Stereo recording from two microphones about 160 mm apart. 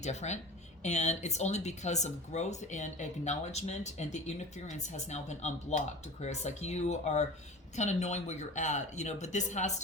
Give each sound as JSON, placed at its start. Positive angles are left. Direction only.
{"t": 0.0, "sound": "speech", "side_deg": 45}